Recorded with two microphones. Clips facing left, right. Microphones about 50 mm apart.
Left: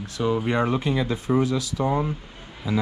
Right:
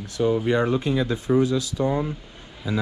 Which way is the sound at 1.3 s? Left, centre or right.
Left.